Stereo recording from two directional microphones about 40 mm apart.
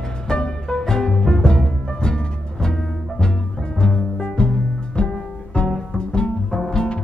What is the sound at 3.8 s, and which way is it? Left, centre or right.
Music, centre.